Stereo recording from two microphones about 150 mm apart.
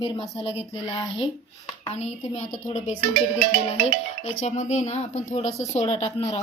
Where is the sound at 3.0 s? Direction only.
60° right (ahead or behind).